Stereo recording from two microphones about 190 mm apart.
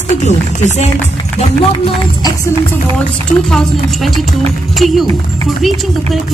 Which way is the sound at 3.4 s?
Centre (ahead or behind).